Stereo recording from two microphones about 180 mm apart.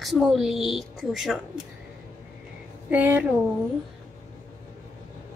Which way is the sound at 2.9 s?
10° right (ahead or behind).